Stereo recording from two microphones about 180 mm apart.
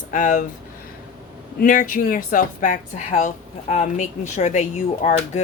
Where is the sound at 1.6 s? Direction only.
50° left (ahead or behind).